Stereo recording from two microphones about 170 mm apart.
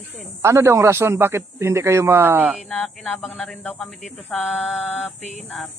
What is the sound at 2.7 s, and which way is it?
Speech, centre (ahead or behind).